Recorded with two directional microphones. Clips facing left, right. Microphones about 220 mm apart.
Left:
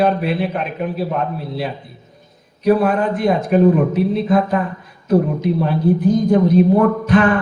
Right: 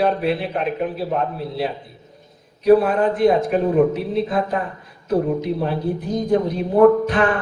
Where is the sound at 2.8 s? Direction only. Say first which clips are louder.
Even; 50° left (ahead or behind).